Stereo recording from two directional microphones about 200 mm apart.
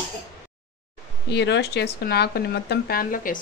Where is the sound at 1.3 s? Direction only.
60° left (ahead or behind).